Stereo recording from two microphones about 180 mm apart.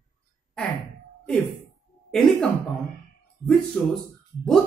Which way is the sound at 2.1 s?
Centre (ahead or behind).